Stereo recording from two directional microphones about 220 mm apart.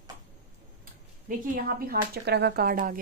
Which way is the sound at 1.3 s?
40° right (ahead or behind).